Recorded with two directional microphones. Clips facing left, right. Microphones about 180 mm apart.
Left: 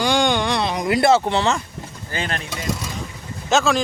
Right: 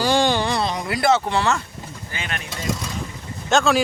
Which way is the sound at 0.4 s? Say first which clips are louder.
Left 1 dB; 5° right (ahead or behind).